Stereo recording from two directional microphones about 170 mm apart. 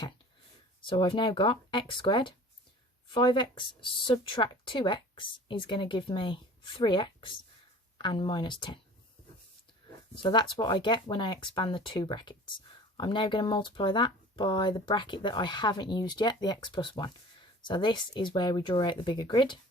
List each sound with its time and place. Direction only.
0.8 s speech: 30° left (ahead or behind)
10.2 s speech: 25° left (ahead or behind)